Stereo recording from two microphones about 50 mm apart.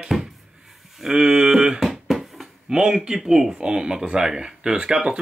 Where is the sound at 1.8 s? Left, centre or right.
Centre.